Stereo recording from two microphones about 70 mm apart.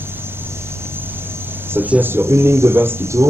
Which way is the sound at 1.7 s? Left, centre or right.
Right.